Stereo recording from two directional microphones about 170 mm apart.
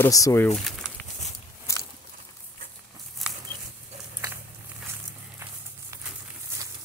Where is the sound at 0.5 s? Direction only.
Centre (ahead or behind).